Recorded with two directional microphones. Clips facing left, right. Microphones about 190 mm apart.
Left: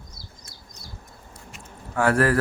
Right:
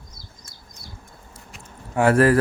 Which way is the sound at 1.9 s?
25° right (ahead or behind).